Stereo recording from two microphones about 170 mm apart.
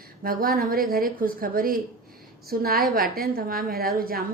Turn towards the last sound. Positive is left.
turn(degrees=-60)  # may be behind; listen again after turning